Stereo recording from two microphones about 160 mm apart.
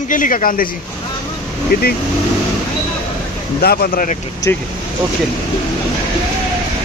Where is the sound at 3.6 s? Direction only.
75° left (ahead or behind).